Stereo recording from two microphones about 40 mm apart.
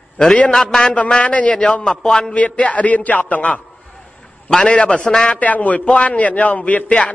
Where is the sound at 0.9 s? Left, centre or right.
Left.